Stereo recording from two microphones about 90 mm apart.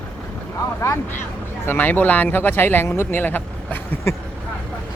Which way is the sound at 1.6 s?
20° left (ahead or behind).